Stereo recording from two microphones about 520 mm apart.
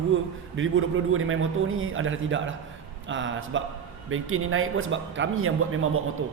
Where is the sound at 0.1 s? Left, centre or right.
Right.